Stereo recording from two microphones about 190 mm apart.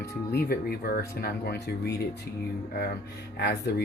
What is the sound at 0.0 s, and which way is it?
Speech, 55° left (ahead or behind).